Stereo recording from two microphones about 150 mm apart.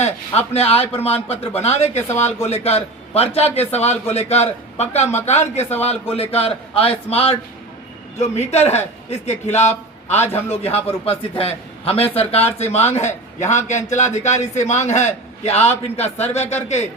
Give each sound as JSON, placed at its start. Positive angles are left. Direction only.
{"t": 0.0, "sound": "a man's voice", "side_deg": 45}
{"t": 2.1, "sound": "speech", "side_deg": 15}
{"t": 2.5, "sound": "a man's voice", "side_deg": 45}